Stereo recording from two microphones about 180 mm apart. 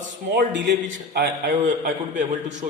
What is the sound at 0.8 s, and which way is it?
A man's voice, 50° right (ahead or behind).